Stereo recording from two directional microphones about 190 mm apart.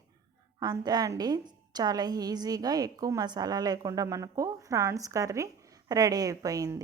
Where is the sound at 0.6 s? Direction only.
20° right (ahead or behind).